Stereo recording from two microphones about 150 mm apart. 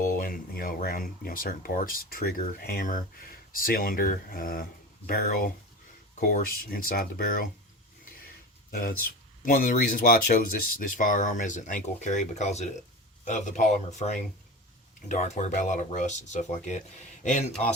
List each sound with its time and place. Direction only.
0.0 s speech: 70° left (ahead or behind)
6.1 s speech: 60° left (ahead or behind); by 7.4 s 80° left
8.7 s speech: 70° left (ahead or behind); by 16.8 s 50° left (ahead or behind)